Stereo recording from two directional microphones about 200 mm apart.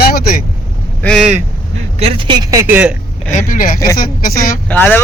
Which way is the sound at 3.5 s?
45° left (ahead or behind).